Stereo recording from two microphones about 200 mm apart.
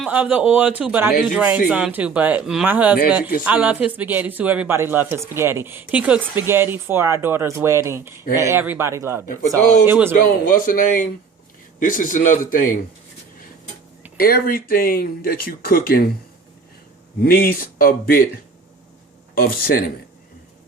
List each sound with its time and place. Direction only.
0.0 s speech: 5° right (ahead or behind)
9.2 s speech: 40° left (ahead or behind)
9.8 s speech: 10° right (ahead or behind)
10.5 s speech: 45° left (ahead or behind)
14.2 s speech: 45° left (ahead or behind)
17.2 s speech: 45° left (ahead or behind)
19.3 s a man's voice: 45° left (ahead or behind)